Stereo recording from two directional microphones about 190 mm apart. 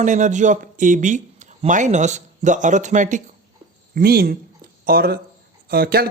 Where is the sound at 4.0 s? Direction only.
50° right (ahead or behind).